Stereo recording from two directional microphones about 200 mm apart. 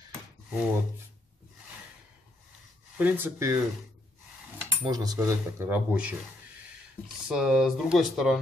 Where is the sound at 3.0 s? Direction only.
10° right (ahead or behind).